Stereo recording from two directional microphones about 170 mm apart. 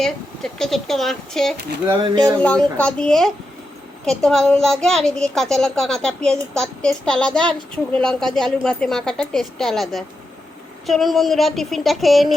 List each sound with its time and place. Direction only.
0.0 s a woman's voice: 5° left (ahead or behind)
2.0 s speech: 25° right (ahead or behind)
2.7 s a woman's voice: 5° left (ahead or behind)